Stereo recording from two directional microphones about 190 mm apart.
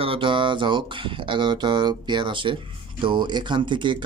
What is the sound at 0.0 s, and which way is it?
Speech, 25° right (ahead or behind).